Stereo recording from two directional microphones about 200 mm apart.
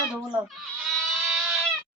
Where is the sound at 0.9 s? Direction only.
Centre (ahead or behind).